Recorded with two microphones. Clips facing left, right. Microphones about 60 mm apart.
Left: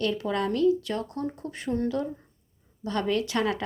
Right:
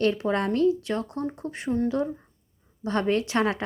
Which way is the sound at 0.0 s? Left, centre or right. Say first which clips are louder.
Right 3 dB; right.